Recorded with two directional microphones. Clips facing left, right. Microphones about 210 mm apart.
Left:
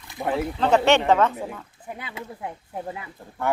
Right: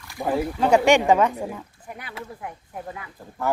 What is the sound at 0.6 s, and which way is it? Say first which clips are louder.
A man's voice: right 1 dB; 10° right (ahead or behind).